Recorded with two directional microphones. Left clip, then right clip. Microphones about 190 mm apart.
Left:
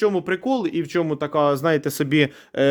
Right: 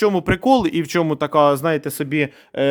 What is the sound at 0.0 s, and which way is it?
Speech, 35° right (ahead or behind).